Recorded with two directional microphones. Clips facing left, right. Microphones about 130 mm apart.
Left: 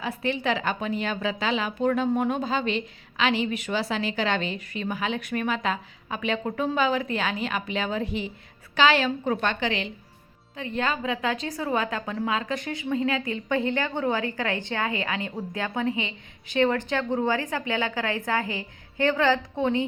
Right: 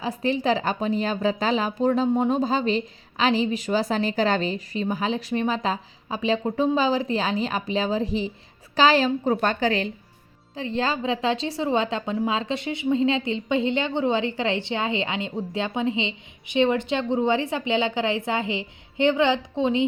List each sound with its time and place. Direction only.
0.0 s speech: 35° right (ahead or behind)
10.5 s a woman's voice: 30° right (ahead or behind)